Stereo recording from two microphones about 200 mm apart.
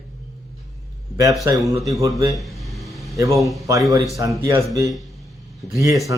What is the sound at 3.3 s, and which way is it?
Speech, centre (ahead or behind).